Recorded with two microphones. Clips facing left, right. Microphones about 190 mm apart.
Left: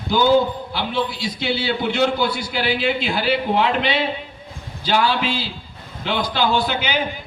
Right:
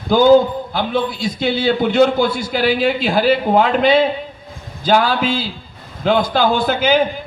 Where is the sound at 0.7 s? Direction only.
50° right (ahead or behind).